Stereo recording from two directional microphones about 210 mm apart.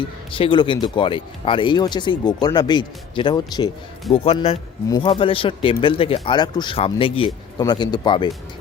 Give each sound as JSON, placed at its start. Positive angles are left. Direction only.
{"t": 0.3, "sound": "speech", "side_deg": 25}